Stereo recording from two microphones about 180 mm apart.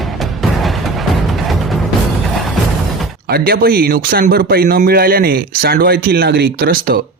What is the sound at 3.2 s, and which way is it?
Speech, 55° right (ahead or behind).